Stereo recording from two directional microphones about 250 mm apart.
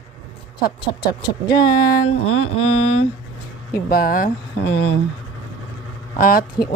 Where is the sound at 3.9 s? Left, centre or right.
Left.